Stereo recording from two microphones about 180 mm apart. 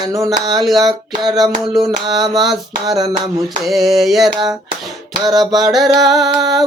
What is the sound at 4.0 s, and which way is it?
Speech, centre (ahead or behind).